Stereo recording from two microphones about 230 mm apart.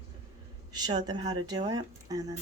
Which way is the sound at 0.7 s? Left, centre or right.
Centre.